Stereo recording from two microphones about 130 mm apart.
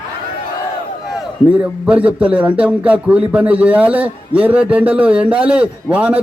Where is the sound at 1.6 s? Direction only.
10° right (ahead or behind).